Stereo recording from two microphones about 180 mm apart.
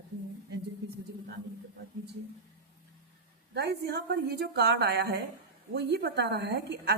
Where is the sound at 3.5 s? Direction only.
65° right (ahead or behind).